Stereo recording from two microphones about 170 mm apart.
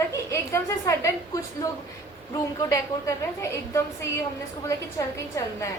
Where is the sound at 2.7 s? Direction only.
15° left (ahead or behind).